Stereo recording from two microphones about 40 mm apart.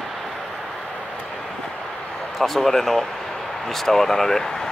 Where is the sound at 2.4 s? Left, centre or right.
Centre.